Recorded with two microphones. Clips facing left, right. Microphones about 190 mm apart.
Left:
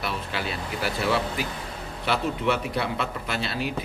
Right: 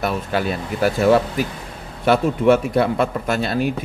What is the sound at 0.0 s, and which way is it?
Speech, 45° right (ahead or behind).